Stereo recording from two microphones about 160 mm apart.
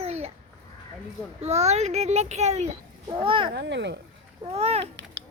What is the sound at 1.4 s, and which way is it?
A child's voice, 45° right (ahead or behind).